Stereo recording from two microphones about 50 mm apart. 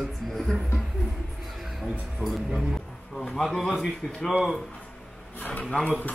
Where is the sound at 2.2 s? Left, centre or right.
Right.